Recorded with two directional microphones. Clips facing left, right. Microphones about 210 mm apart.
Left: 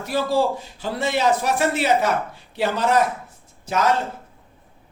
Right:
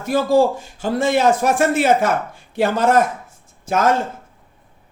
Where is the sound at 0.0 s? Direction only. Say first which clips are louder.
Right 5 dB; 50° right (ahead or behind).